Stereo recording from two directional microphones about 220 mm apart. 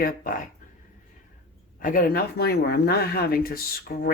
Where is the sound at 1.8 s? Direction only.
40° left (ahead or behind).